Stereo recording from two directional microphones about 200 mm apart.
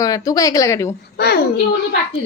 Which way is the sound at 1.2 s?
55° left (ahead or behind).